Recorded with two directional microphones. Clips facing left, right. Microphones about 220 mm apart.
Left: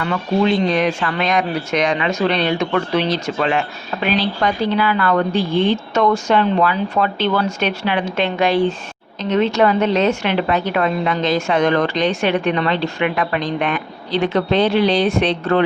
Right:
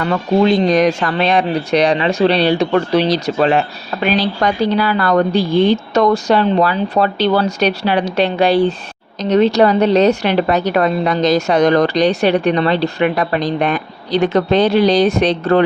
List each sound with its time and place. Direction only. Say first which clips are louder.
0.0 s a woman's voice: right 4 dB; 40° right (ahead or behind)